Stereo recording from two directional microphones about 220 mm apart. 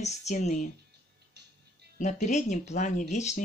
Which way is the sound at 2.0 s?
35° left (ahead or behind).